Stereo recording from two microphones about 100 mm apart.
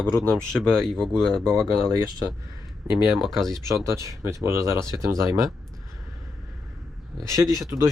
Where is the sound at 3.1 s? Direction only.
5° left (ahead or behind).